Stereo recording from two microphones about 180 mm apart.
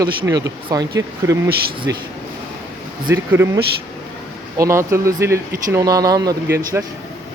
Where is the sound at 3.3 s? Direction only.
15° right (ahead or behind).